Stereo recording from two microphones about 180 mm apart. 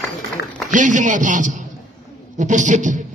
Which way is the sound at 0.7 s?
45° right (ahead or behind).